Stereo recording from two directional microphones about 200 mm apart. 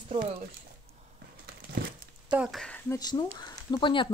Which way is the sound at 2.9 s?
20° left (ahead or behind).